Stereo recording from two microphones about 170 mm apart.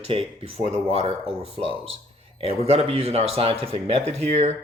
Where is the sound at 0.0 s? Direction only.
35° right (ahead or behind).